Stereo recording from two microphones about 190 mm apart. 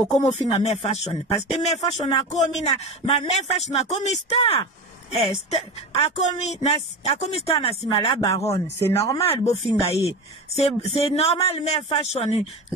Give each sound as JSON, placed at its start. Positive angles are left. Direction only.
{"t": 0.1, "sound": "speech", "side_deg": 35}
{"t": 8.3, "sound": "speech", "side_deg": 15}
{"t": 9.3, "sound": "speech", "side_deg": 35}